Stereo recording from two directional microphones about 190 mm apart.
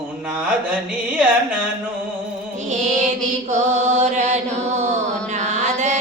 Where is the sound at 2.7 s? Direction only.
40° right (ahead or behind).